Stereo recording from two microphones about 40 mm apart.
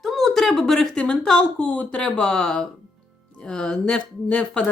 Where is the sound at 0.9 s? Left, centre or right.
Centre.